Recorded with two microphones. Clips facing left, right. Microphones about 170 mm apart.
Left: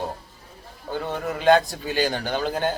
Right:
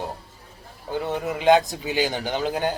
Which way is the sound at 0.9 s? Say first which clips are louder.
Right 2 dB; 15° right (ahead or behind).